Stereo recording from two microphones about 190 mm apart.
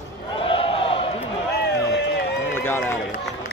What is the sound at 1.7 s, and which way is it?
Run, 60° left (ahead or behind).